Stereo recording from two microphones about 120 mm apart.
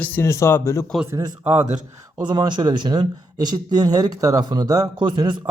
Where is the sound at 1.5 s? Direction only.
65° right (ahead or behind).